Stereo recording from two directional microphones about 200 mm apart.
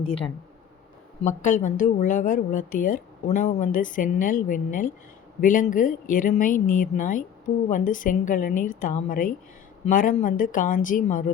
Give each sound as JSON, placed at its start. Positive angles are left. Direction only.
{"t": 0.0, "sound": "speech", "side_deg": 30}
{"t": 1.2, "sound": "a woman's voice", "side_deg": 40}